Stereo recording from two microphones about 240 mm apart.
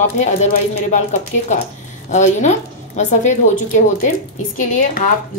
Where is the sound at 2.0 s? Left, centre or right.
Left.